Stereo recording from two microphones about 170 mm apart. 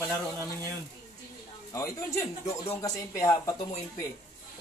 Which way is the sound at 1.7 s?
15° left (ahead or behind).